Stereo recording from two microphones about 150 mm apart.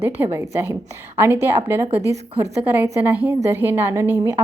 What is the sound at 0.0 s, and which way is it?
A woman's voice, 15° right (ahead or behind).